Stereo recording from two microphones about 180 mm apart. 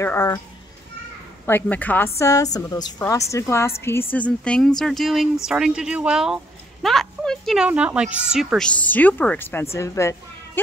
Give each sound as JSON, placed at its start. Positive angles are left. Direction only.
{"t": 0.0, "sound": "a woman's voice", "side_deg": 15}
{"t": 1.4, "sound": "a woman's voice", "side_deg": 10}